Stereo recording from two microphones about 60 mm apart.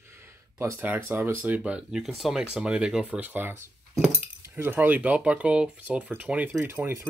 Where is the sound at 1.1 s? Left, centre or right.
Right.